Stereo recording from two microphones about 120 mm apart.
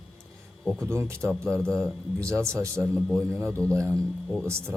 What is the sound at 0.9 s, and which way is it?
Speech, 20° right (ahead or behind).